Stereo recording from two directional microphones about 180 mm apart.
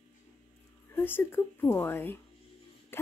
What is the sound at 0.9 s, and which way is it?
Speech, 10° left (ahead or behind).